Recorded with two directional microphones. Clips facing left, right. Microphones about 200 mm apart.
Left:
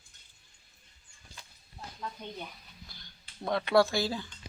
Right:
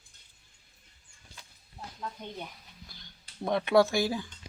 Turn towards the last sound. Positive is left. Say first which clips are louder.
# right 2 dB
turn(degrees=-15)  # may be behind; listen again after turning